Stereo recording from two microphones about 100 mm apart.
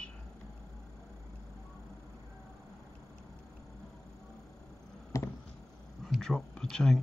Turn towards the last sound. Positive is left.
turn(degrees=5)  # may be behind; listen again after turning